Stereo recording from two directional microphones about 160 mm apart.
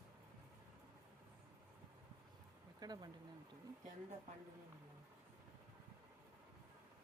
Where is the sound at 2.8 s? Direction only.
25° right (ahead or behind).